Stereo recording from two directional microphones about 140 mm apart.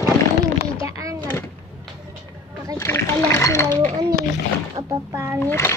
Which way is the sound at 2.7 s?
20° left (ahead or behind).